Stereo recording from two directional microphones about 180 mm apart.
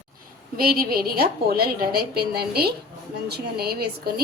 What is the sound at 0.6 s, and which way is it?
A woman's voice, 55° right (ahead or behind).